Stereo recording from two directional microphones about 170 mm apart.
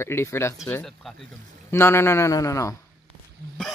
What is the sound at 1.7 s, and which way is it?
Speech, 15° left (ahead or behind).